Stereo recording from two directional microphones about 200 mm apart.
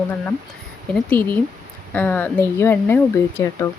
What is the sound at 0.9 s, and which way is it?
Speech, 10° left (ahead or behind).